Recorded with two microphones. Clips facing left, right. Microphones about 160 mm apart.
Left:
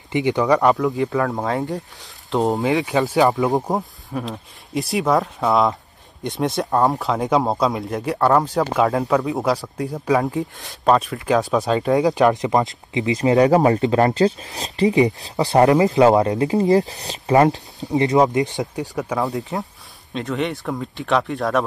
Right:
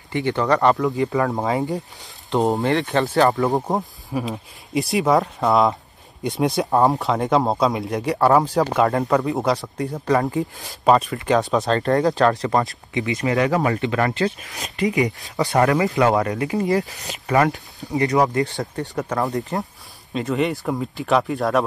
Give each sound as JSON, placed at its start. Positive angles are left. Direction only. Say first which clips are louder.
{"t": 0.1, "sound": "speech", "louder": "left 3 dB", "side_deg": 15}
{"t": 0.5, "sound": "speech", "louder": "right 1 dB", "side_deg": 5}
{"t": 12.2, "sound": "speech", "louder": "left 2 dB", "side_deg": 15}
{"t": 13.5, "sound": "speech", "louder": "left 5 dB", "side_deg": 35}
{"t": 18.8, "sound": "speech", "louder": "even", "side_deg": 5}